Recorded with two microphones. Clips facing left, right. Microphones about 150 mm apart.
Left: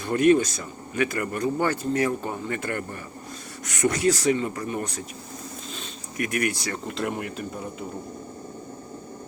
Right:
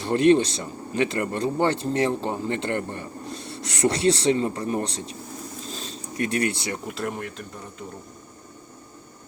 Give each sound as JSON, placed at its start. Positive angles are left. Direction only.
{"t": 0.0, "sound": "speech", "side_deg": -30}
{"t": 5.7, "sound": "a sound", "side_deg": -35}
{"t": 6.8, "sound": "speech", "side_deg": 0}